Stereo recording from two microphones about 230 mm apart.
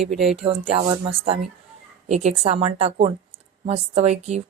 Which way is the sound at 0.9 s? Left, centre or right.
Right.